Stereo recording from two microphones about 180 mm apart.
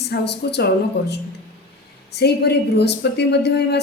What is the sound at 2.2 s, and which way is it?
A woman's voice, 65° left (ahead or behind).